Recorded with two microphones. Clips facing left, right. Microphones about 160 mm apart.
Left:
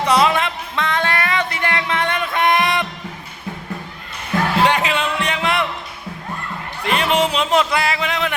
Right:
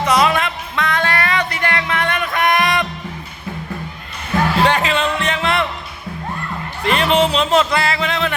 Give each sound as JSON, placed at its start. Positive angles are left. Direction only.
{"t": 0.1, "sound": "music", "side_deg": 25}
{"t": 4.7, "sound": "music", "side_deg": 15}
{"t": 6.8, "sound": "a sound", "side_deg": 10}